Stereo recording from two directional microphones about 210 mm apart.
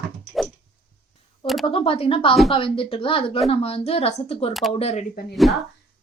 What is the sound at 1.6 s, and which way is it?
Speech, 25° left (ahead or behind).